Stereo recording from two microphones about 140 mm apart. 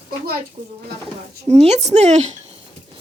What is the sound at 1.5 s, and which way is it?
Speech, 50° right (ahead or behind).